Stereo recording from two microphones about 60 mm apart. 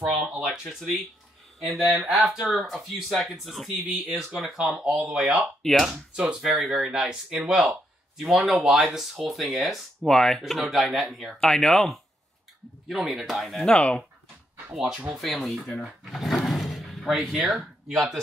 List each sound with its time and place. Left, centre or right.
0.4 s speech: centre
5.6 s speech: centre
6.1 s speech: centre
6.5 s speech: centre
8.2 s speech: centre
10.0 s speech: centre
10.4 s speech: centre
13.7 s speech: centre
14.7 s speech: centre
15.8 s drawer open or close: centre
17.2 s speech: centre
17.5 s speech: centre